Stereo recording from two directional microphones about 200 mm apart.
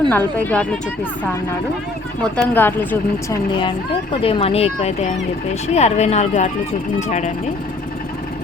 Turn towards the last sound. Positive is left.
turn(degrees=35)  # may be behind; listen again after turning